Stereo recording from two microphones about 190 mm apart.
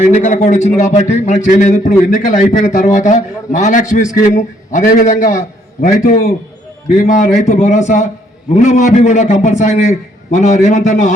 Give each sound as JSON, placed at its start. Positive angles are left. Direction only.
{"t": 0.0, "sound": "a man's voice", "side_deg": 35}